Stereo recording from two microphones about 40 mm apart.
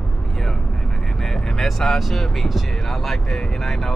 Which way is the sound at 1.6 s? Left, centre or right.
Centre.